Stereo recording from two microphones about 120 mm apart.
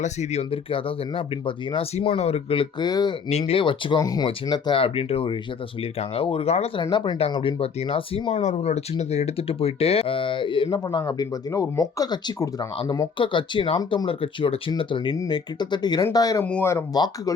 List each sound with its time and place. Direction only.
0.0 s speech: 70° left (ahead or behind); by 3.2 s 35° left (ahead or behind)
3.2 s speech: 60° left (ahead or behind)
4.0 s speech: 30° left (ahead or behind)
4.8 s speech: 55° left (ahead or behind)
6.9 s speech: 40° left (ahead or behind)
7.2 s speech: 55° left (ahead or behind)
8.3 s speech: 65° left (ahead or behind); by 16.4 s 30° left (ahead or behind)
16.4 s speech: 15° left (ahead or behind)
16.9 s speech: 35° left (ahead or behind)